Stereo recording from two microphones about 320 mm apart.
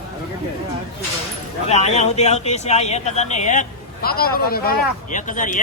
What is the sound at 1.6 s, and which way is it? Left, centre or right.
Speech, centre.